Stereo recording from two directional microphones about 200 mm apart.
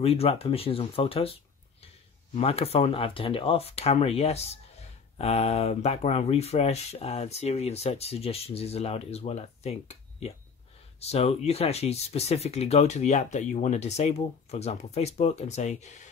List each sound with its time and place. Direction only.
0.0 s speech: 30° left (ahead or behind)